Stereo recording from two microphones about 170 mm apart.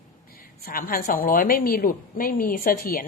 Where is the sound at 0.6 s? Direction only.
60° left (ahead or behind).